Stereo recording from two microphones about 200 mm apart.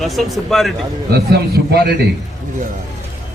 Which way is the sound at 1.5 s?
50° right (ahead or behind).